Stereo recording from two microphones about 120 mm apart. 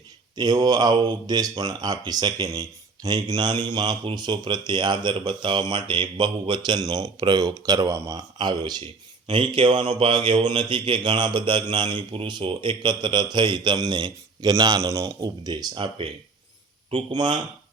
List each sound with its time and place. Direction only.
0.3 s speech: 35° right (ahead or behind)
17.1 s speech: 40° right (ahead or behind)